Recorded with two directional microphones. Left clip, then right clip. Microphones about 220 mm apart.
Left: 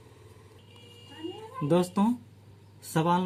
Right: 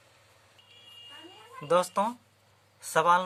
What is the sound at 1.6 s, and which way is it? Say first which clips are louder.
Speech: right 1 dB; 30° right (ahead or behind).